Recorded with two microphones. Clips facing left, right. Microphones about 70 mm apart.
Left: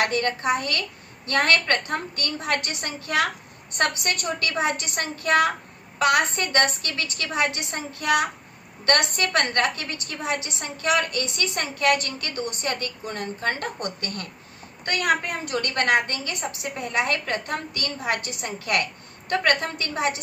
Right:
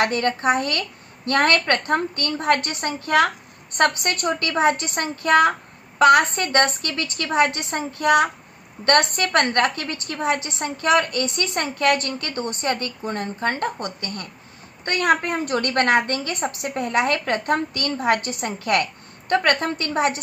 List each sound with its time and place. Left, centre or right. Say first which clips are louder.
0.0 s a woman's voice: right 3 dB; right